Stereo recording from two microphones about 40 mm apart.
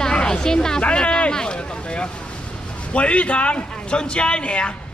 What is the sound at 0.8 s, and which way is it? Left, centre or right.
Speech, left.